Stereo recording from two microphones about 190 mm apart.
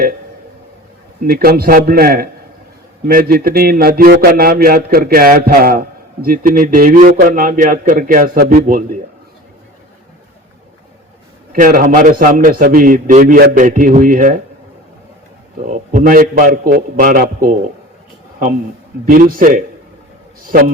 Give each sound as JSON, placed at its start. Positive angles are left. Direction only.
{"t": 1.3, "sound": "a man's voice", "side_deg": -50}
{"t": 11.5, "sound": "a man's voice", "side_deg": -45}
{"t": 15.6, "sound": "a man's voice", "side_deg": -40}
{"t": 19.0, "sound": "a man's voice", "side_deg": -50}